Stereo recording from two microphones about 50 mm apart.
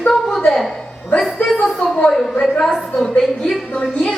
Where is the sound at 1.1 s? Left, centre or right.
Left.